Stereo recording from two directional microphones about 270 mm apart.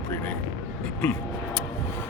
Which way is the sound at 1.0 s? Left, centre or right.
Centre.